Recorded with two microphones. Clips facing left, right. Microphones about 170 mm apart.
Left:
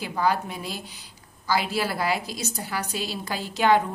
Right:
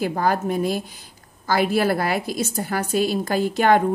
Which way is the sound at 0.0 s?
50° right (ahead or behind).